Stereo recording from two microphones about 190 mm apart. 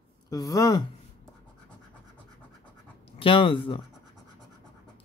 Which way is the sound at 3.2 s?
25° left (ahead or behind).